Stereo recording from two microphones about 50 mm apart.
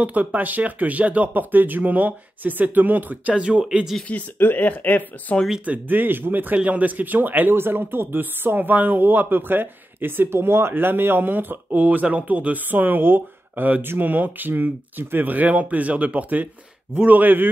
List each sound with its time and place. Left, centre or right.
0.0 s speech: right
3.3 s speech: right
3.9 s speech: centre
4.4 s speech: left
4.6 s speech: left
5.7 s speech: right